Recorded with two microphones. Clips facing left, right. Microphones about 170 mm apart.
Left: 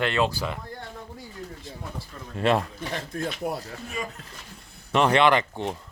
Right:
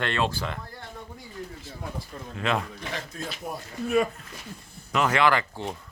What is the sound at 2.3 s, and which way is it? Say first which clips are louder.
Speech: left 5 dB; 40° left (ahead or behind).